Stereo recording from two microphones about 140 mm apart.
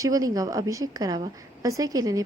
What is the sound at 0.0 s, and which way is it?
A woman's voice, 25° right (ahead or behind).